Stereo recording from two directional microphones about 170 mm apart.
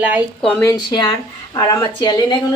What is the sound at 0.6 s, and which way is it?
Speech, 25° left (ahead or behind).